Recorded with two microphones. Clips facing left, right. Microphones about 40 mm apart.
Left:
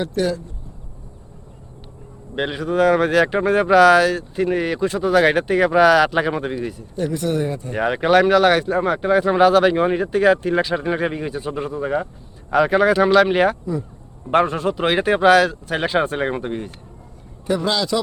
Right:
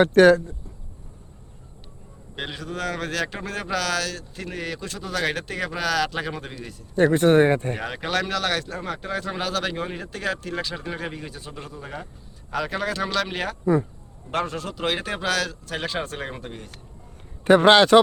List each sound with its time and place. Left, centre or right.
0.0 s speech: right
2.3 s speech: centre
6.9 s speech: right
7.8 s speech: left
17.4 s speech: right